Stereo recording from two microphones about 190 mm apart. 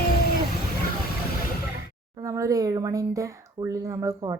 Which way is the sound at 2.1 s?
15° right (ahead or behind).